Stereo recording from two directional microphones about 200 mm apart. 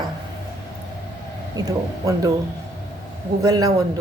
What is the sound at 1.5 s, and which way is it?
Speech, 20° right (ahead or behind).